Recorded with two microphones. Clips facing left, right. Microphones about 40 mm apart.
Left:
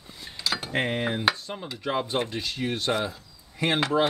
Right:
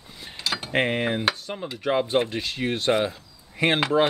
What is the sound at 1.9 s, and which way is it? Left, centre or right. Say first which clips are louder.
Speech: right 4 dB; right.